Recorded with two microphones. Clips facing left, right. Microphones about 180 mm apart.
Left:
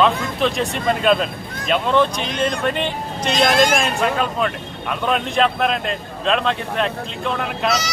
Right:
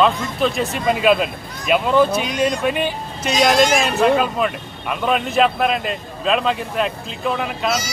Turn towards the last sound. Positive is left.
turn(degrees=0)  # may be behind; listen again after turning